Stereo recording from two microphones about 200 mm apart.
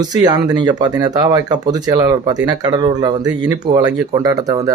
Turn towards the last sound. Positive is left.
turn(degrees=-20)  # may be behind; listen again after turning